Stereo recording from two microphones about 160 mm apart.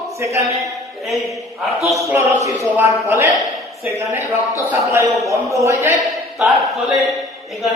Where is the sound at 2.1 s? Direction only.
20° right (ahead or behind).